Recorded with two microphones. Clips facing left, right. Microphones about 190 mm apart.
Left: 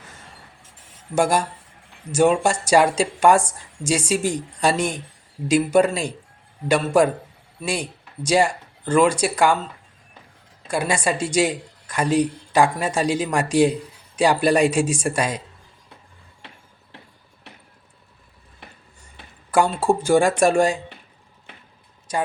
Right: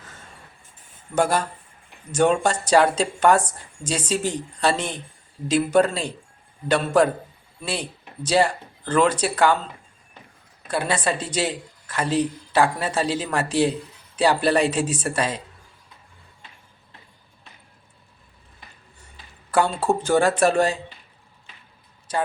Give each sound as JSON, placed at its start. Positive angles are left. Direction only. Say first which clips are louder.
{"t": 1.1, "sound": "a woman's voice", "louder": "left 2 dB", "side_deg": 10}
{"t": 10.7, "sound": "a woman's voice", "louder": "left 1 dB", "side_deg": 10}
{"t": 17.5, "sound": "vehicle", "louder": "left 6 dB", "side_deg": 80}
{"t": 19.5, "sound": "a woman's voice", "louder": "left 2 dB", "side_deg": 10}
{"t": 21.5, "sound": "a sound", "louder": "left 6 dB", "side_deg": 65}
{"t": 22.1, "sound": "a woman's voice", "louder": "left 1 dB", "side_deg": 10}